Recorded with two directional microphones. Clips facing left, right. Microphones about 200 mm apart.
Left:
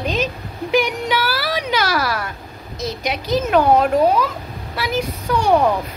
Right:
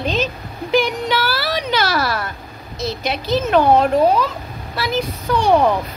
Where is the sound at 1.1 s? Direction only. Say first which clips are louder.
Right 1 dB; 10° left (ahead or behind).